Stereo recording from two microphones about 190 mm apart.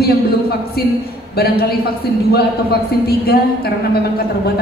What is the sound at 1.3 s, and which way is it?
Speech, 55° left (ahead or behind).